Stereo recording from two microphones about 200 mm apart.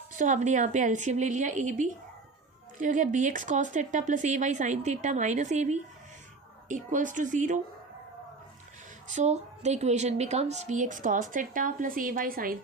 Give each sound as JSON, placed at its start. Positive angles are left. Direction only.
{"t": 0.2, "sound": "a woman's voice", "side_deg": -35}
{"t": 9.0, "sound": "a woman's voice", "side_deg": -35}